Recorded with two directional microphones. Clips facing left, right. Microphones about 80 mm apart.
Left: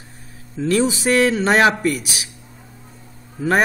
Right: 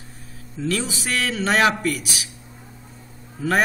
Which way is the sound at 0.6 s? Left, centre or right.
Left.